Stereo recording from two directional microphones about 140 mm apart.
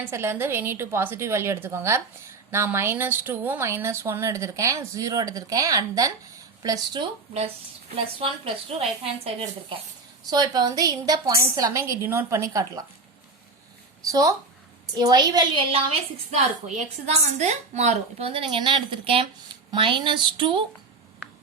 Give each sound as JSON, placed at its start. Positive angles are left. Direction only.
{"t": 0.1, "sound": "a woman's voice", "side_deg": -15}
{"t": 7.3, "sound": "a woman's voice", "side_deg": -45}
{"t": 10.2, "sound": "a woman's voice", "side_deg": -30}
{"t": 14.1, "sound": "a woman's voice", "side_deg": -25}
{"t": 15.7, "sound": "a woman's voice", "side_deg": -45}